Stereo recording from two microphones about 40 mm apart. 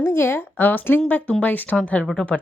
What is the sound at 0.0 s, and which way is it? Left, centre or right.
Speech, left.